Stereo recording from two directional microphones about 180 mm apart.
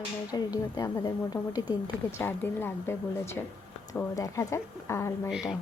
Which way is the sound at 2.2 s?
10° left (ahead or behind).